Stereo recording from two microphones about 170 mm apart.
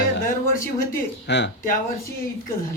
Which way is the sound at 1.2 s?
90° left.